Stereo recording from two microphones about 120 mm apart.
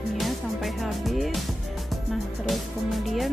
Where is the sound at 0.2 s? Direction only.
Centre (ahead or behind).